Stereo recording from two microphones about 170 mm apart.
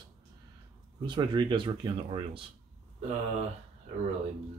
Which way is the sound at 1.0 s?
25° right (ahead or behind).